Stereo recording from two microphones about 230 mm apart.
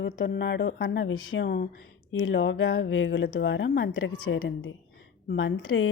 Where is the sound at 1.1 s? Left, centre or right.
Left.